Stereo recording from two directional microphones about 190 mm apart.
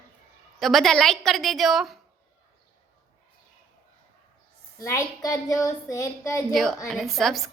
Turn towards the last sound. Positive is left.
turn(degrees=0)  # may be behind; listen again after turning